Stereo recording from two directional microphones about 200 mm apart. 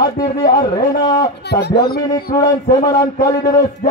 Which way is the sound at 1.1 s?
55° left (ahead or behind).